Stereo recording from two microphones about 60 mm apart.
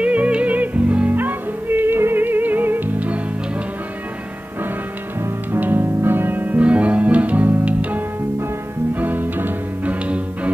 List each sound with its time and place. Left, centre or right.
0.0 s music: right
5.2 s music: right
9.0 s music: right